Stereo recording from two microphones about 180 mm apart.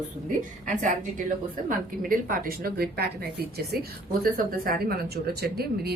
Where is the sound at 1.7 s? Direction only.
50° right (ahead or behind).